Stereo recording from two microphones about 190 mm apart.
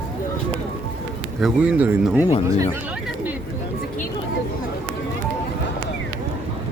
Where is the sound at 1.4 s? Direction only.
5° right (ahead or behind).